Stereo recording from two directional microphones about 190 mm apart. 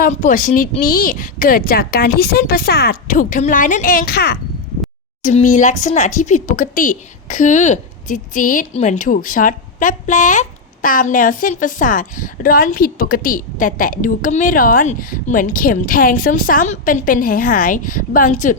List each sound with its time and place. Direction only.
0.0 s a woman's voice: 45° left (ahead or behind)
5.2 s a woman's voice: 40° left (ahead or behind)